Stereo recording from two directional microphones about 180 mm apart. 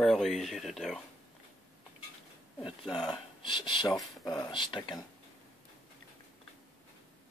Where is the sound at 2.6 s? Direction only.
25° left (ahead or behind).